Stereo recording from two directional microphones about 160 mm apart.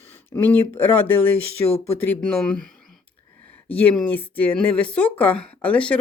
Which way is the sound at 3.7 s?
10° left (ahead or behind).